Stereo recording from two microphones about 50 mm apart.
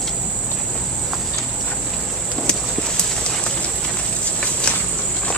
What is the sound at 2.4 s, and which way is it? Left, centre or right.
Clip-clop, centre.